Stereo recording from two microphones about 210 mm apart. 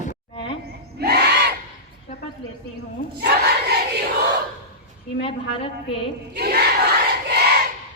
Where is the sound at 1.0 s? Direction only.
50° right (ahead or behind).